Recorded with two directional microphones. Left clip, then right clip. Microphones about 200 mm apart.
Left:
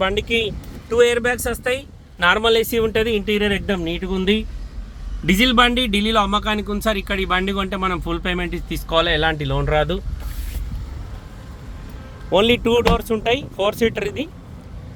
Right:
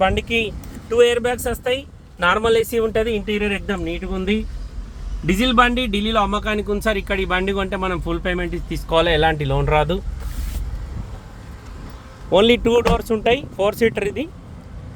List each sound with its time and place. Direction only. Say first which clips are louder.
0.0 s speech: right 1 dB; centre (ahead or behind)
2.1 s speech: left 1 dB; 15° left (ahead or behind); by 4.4 s 30° left (ahead or behind)
5.2 s a man's voice: left 1 dB; 15° left (ahead or behind); by 10.0 s centre (ahead or behind)
12.3 s a man's voice: right 1 dB; 5° right (ahead or behind)